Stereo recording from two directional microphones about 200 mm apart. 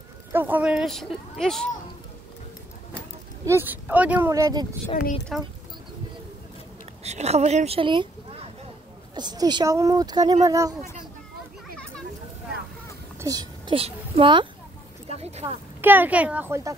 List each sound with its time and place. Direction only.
0.3 s speech: 10° right (ahead or behind)
3.4 s speech: 10° right (ahead or behind)
4.8 s speech: 40° left (ahead or behind)
7.0 s speech: 35° right (ahead or behind); by 10.7 s 15° right (ahead or behind)
13.2 s a child's voice: 20° right (ahead or behind)
15.0 s a sound: 30° right (ahead or behind)
15.8 s speech: 10° right (ahead or behind)